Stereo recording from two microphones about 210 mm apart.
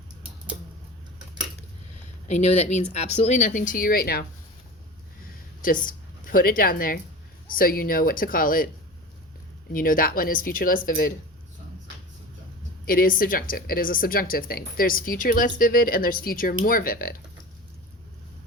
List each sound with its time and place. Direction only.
2.2 s speech: 30° left (ahead or behind)
5.6 s a woman's voice: 40° left (ahead or behind)
9.7 s speech: 40° left (ahead or behind)
12.8 s speech: 45° left (ahead or behind)